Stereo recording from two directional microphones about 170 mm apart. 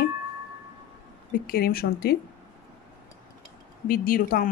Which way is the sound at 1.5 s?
65° left (ahead or behind).